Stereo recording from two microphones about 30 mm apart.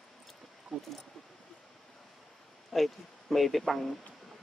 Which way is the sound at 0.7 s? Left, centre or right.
Centre.